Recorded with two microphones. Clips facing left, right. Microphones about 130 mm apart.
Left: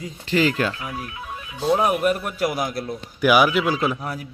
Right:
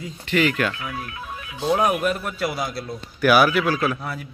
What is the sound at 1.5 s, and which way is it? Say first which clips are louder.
Speech: left 1 dB; 5° left (ahead or behind).